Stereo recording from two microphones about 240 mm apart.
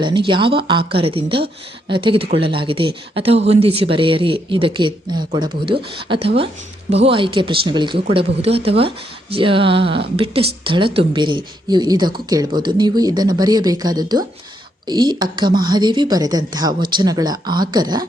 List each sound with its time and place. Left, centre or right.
0.0 s speech: centre